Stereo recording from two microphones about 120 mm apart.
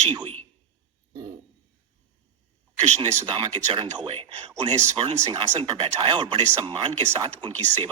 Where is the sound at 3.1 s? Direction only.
45° right (ahead or behind).